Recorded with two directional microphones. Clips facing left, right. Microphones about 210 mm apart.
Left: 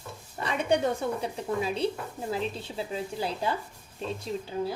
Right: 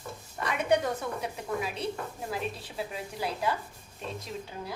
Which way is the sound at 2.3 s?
25° left (ahead or behind).